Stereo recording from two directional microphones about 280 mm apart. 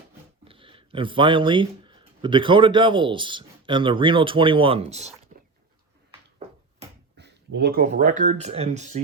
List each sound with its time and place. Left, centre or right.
0.4 s speech: centre
7.2 s speech: right